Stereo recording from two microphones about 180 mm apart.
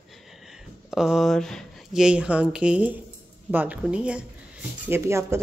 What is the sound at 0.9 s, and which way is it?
Speech, centre (ahead or behind).